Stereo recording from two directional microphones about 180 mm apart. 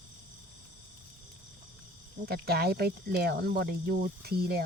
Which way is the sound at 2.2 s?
60° right (ahead or behind).